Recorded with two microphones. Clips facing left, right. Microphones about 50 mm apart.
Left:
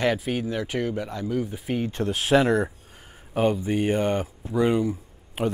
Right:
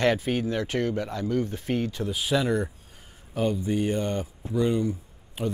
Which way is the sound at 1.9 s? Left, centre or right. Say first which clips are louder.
Left 5 dB; left.